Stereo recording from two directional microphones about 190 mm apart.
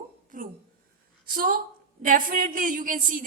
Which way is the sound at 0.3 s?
45° right (ahead or behind).